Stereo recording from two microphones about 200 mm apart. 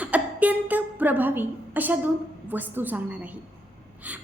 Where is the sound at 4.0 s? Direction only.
5° right (ahead or behind).